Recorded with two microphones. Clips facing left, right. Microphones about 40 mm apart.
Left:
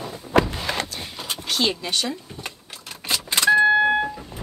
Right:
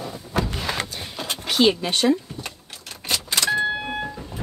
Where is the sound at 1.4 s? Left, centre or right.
Centre.